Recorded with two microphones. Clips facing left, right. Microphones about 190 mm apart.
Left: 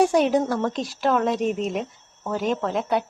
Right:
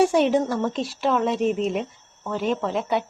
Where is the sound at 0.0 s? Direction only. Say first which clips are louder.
Even; centre (ahead or behind).